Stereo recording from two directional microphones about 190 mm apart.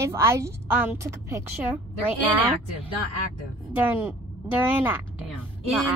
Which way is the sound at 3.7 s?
10° right (ahead or behind).